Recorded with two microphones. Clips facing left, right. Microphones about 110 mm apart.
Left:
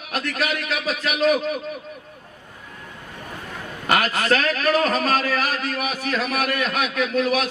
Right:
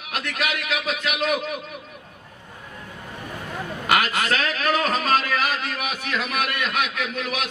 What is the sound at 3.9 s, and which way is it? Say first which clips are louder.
A man's voice: left 2 dB; 40° left (ahead or behind).